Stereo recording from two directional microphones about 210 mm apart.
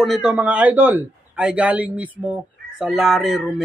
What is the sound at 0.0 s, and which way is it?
A man's voice, centre (ahead or behind).